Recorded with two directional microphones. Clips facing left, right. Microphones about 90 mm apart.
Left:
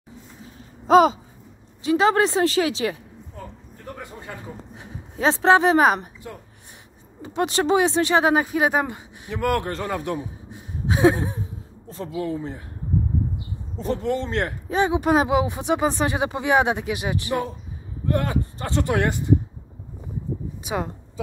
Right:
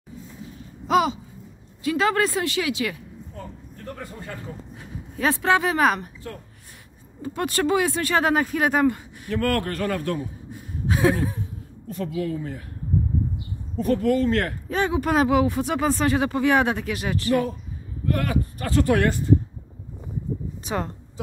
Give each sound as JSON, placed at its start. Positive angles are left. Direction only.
{"t": 0.8, "sound": "a sound", "side_deg": 35}
{"t": 1.8, "sound": "speech", "side_deg": 25}
{"t": 3.8, "sound": "a man's voice", "side_deg": 15}
{"t": 13.7, "sound": "speech", "side_deg": 25}
{"t": 20.6, "sound": "a woman's voice", "side_deg": 10}